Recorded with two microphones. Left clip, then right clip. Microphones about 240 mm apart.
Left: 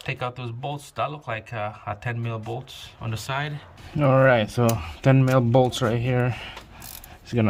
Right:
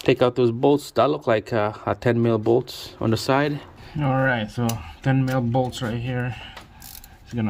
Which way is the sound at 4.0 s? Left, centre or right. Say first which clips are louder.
Left 4 dB; left.